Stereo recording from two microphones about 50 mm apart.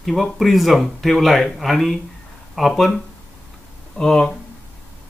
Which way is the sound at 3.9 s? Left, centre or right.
Centre.